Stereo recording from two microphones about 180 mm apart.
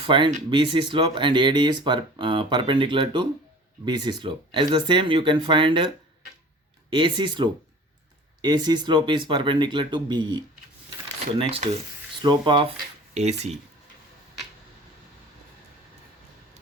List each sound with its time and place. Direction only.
0.0 s speech: 25° right (ahead or behind)
6.9 s speech: 25° right (ahead or behind)
12.2 s speech: 25° right (ahead or behind)
13.1 s speech: 35° right (ahead or behind)